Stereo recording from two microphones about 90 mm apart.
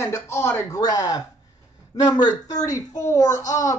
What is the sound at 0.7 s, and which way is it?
Speech, 45° left (ahead or behind).